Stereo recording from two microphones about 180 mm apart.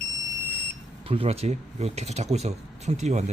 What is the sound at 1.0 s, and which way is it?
Speech, 35° right (ahead or behind).